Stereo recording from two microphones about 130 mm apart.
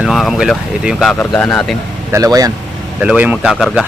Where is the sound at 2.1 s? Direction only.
25° right (ahead or behind).